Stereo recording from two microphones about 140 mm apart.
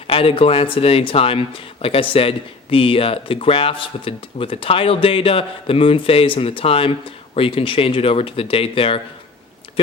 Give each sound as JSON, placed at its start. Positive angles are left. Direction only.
{"t": 0.1, "sound": "speech", "side_deg": 40}